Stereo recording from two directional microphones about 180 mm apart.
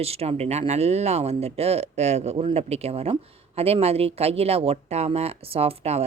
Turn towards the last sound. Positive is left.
turn(degrees=-35)  # may be behind; listen again after turning